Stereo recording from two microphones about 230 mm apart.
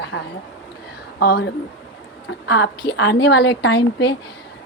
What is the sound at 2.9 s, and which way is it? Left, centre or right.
A woman's voice, left.